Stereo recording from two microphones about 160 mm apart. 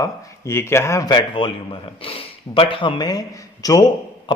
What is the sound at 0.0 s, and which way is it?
Speech, 15° left (ahead or behind).